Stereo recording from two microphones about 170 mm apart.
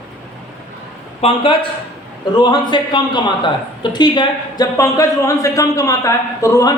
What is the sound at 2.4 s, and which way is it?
Speech, 25° left (ahead or behind).